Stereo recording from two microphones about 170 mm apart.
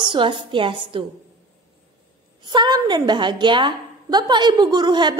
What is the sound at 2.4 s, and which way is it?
A woman's voice, 25° right (ahead or behind).